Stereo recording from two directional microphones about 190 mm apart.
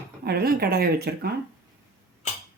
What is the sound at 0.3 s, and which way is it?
Speech, 55° right (ahead or behind).